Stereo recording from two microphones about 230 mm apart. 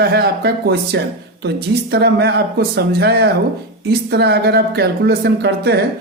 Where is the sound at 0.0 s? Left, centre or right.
Right.